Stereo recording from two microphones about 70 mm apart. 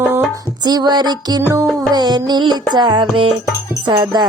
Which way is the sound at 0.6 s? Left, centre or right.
Right.